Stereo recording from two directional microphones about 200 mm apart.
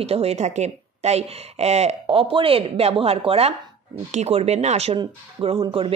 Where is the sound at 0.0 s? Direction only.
30° right (ahead or behind).